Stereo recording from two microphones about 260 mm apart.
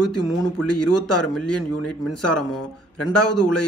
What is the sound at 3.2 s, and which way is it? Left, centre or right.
Speech, left.